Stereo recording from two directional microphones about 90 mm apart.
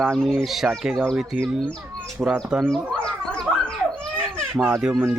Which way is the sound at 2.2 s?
15° right (ahead or behind).